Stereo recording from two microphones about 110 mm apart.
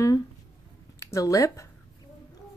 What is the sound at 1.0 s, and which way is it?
Speech, 30° left (ahead or behind).